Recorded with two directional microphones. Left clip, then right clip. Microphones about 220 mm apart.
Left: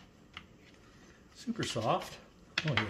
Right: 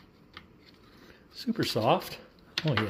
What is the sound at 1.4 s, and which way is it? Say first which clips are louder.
Speech: right 7 dB; 45° right (ahead or behind).